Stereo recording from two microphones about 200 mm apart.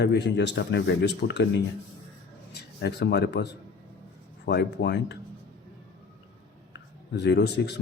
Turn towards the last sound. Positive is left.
turn(degrees=55)  # may be behind; listen again after turning